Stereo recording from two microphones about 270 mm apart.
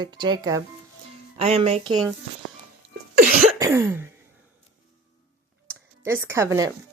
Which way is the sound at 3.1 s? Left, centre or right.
Right.